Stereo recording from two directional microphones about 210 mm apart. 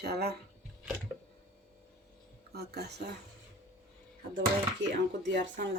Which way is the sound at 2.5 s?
50° right (ahead or behind).